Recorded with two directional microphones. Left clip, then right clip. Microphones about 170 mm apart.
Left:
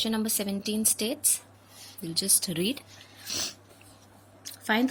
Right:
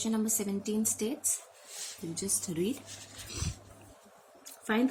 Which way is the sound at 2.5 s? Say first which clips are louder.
Left 3 dB; 60° left (ahead or behind).